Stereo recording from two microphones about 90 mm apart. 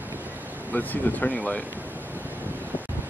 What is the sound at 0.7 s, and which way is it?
Speech, 20° left (ahead or behind).